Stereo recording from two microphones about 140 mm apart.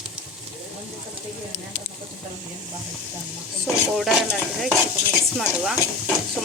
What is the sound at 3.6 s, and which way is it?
Stir, 5° right (ahead or behind).